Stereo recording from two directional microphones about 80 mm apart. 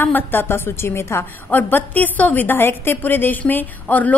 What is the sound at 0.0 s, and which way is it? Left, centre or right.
A woman's voice, left.